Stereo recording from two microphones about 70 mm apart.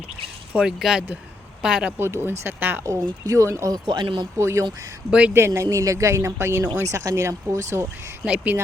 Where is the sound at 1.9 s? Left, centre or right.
Right.